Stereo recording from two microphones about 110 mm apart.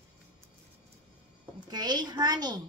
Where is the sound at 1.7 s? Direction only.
40° right (ahead or behind).